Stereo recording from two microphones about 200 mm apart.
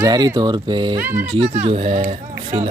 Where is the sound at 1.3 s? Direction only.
30° right (ahead or behind).